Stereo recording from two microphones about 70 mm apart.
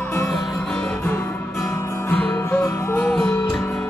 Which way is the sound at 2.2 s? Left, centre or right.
Left.